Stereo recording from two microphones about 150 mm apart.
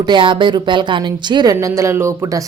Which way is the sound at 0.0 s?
30° right (ahead or behind).